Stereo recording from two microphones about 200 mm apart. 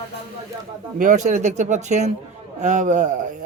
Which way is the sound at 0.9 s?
40° right (ahead or behind).